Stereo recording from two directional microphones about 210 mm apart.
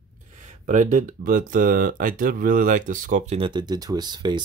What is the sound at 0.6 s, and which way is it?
Speech, 35° right (ahead or behind).